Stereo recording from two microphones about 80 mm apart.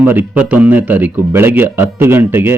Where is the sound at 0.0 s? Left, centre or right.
Right.